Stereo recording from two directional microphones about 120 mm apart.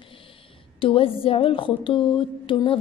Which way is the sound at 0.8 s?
50° left (ahead or behind).